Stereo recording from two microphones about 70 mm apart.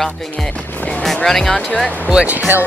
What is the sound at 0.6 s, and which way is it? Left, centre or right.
Speech, left.